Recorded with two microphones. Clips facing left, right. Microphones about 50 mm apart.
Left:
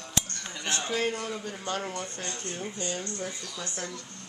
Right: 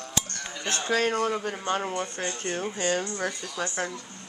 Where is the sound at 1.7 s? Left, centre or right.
Right.